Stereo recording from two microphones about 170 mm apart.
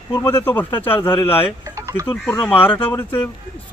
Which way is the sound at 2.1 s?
10° left (ahead or behind).